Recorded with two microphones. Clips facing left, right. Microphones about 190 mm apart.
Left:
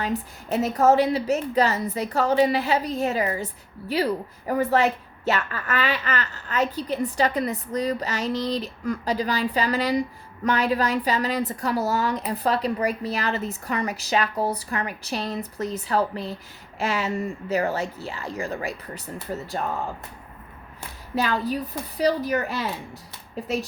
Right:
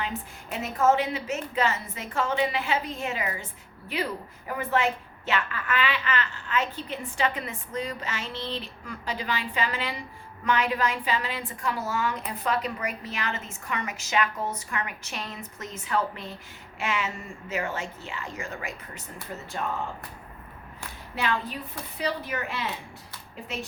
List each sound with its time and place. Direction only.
0.0 s a woman's voice: 40° left (ahead or behind)
16.7 s a sound: 35° left (ahead or behind)
17.5 s a woman's voice: 35° left (ahead or behind)
21.2 s a woman's voice: 40° left (ahead or behind)